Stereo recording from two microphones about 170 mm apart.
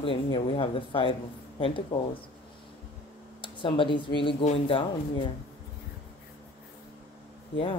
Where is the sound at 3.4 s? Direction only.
30° left (ahead or behind).